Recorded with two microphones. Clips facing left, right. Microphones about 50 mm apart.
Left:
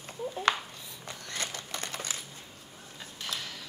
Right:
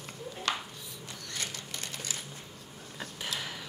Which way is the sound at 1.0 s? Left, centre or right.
Left.